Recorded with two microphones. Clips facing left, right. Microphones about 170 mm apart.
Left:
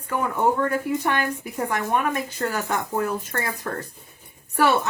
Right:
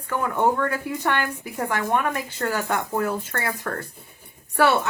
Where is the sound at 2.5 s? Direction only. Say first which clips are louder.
Right 1 dB; 15° left (ahead or behind).